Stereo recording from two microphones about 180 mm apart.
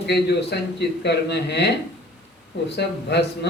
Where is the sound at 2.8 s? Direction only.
70° left (ahead or behind).